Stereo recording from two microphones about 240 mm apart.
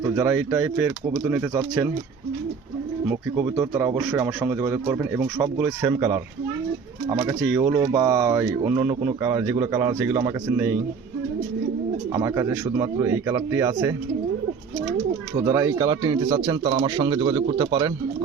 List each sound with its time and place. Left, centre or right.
0.2 s a man's voice: centre
3.1 s a man's voice: centre
12.1 s a man's voice: centre
15.4 s a man's voice: centre